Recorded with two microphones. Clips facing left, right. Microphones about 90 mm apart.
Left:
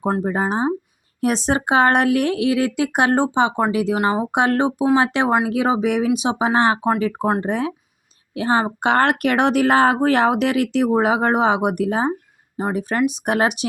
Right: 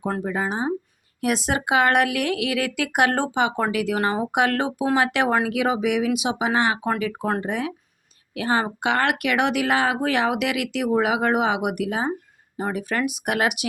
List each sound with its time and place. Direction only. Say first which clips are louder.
0.2 s speech: left 5 dB; 35° left (ahead or behind)